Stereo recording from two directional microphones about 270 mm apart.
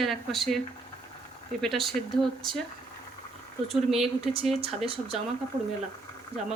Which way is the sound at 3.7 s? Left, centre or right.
Centre.